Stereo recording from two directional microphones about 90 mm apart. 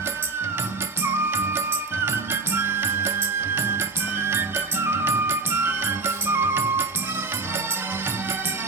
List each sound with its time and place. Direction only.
1.0 s music: 25° right (ahead or behind)